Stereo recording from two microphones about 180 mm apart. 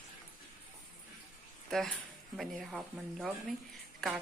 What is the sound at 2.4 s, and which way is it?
A woman's voice, centre (ahead or behind).